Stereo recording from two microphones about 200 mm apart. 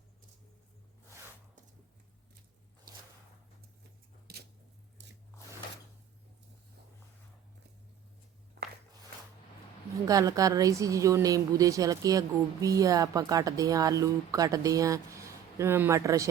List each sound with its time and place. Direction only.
4.3 s a sound: 50° right (ahead or behind)
5.0 s biting: 60° right (ahead or behind)
10.1 s a woman's voice: 15° right (ahead or behind)